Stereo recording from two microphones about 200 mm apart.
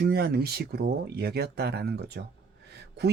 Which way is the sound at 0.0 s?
50° right (ahead or behind).